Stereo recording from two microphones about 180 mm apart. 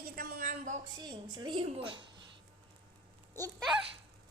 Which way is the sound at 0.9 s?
25° right (ahead or behind).